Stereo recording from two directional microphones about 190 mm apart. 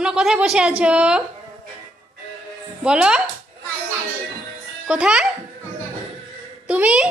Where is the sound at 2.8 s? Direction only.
5° right (ahead or behind).